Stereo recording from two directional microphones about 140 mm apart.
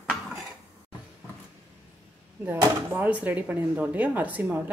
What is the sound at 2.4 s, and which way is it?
Speech, 15° right (ahead or behind).